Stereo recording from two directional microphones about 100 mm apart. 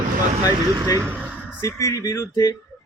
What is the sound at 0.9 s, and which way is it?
Speech, 20° right (ahead or behind).